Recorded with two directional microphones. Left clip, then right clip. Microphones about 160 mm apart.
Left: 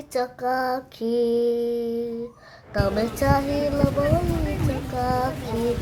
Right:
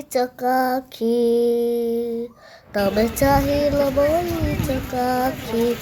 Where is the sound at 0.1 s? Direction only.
35° right (ahead or behind).